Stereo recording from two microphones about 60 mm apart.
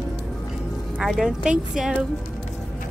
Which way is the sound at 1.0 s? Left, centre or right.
Centre.